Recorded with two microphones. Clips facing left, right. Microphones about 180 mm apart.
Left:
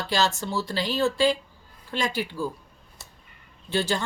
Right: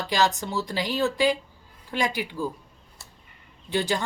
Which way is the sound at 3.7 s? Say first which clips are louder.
Even; 15° right (ahead or behind).